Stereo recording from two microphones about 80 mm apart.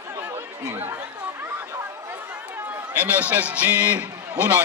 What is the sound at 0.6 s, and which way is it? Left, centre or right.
Speech, right.